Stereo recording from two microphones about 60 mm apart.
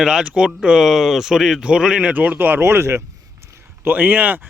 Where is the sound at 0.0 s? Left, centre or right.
Centre.